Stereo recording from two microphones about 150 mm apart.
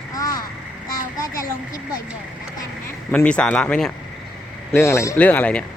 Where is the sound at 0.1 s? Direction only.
25° left (ahead or behind).